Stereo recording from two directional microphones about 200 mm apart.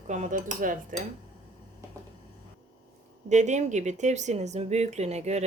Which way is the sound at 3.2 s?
35° right (ahead or behind).